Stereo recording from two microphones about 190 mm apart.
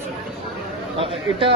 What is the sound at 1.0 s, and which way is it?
Speech, 30° right (ahead or behind).